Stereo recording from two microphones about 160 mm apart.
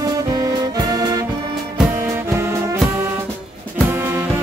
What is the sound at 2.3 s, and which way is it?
Music, 20° right (ahead or behind).